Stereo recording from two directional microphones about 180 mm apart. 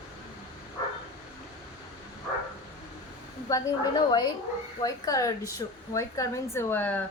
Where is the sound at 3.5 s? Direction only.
25° left (ahead or behind).